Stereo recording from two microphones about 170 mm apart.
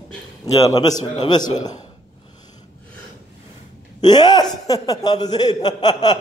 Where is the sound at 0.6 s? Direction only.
20° left (ahead or behind).